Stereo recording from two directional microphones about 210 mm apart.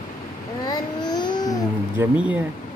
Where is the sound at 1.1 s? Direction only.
20° left (ahead or behind).